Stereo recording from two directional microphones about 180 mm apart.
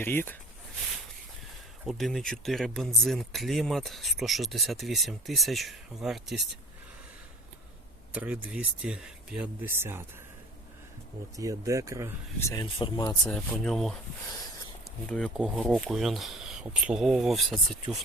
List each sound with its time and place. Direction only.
0.0 s speech: 10° left (ahead or behind)
1.8 s speech: centre (ahead or behind)
8.1 s speech: 10° right (ahead or behind)
11.3 s speech: 20° right (ahead or behind)
12.4 s speech: 15° left (ahead or behind)
13.2 s speech: 5° left (ahead or behind)
15.0 s speech: 5° left (ahead or behind)